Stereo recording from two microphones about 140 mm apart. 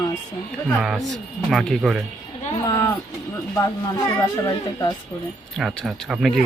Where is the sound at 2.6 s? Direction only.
25° left (ahead or behind).